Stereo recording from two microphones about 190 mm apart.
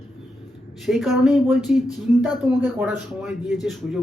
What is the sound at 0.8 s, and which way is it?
A man's voice, centre (ahead or behind).